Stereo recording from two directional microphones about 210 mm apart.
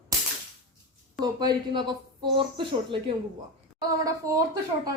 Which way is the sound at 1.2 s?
20° right (ahead or behind).